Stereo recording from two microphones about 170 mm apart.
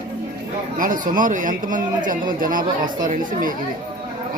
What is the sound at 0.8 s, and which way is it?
Speech, 50° right (ahead or behind).